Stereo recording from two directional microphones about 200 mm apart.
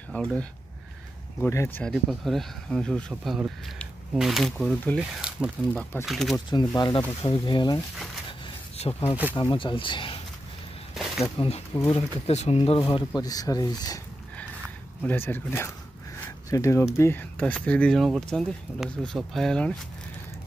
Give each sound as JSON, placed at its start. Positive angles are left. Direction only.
{"t": 0.1, "sound": "speech", "side_deg": 5}
{"t": 6.3, "sound": "speech", "side_deg": 20}
{"t": 8.3, "sound": "a sound", "side_deg": 30}
{"t": 9.4, "sound": "speech", "side_deg": 25}
{"t": 11.3, "sound": "speech", "side_deg": 30}
{"t": 15.0, "sound": "speech", "side_deg": 10}